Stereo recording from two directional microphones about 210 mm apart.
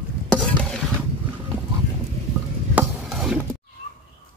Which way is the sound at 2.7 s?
5° right (ahead or behind).